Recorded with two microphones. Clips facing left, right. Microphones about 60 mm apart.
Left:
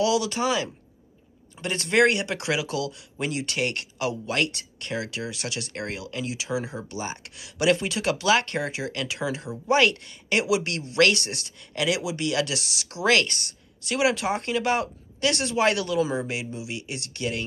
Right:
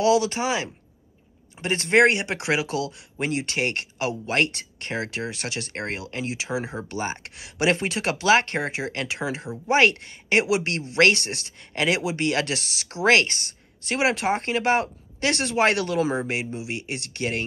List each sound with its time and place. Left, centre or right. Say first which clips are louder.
0.0 s speech: right 3 dB; right